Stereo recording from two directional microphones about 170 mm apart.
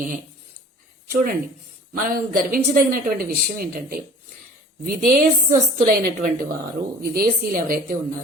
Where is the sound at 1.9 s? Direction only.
55° right (ahead or behind).